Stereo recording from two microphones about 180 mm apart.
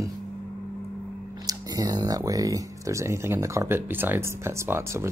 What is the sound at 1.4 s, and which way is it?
Speech, 20° right (ahead or behind).